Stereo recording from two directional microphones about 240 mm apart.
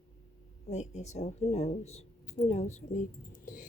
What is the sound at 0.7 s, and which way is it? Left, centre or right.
A woman's voice, left.